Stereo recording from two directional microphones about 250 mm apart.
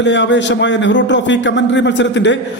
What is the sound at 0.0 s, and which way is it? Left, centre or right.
A man's voice, left.